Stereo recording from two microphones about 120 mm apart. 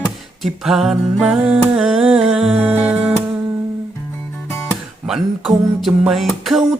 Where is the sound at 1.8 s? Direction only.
Centre (ahead or behind).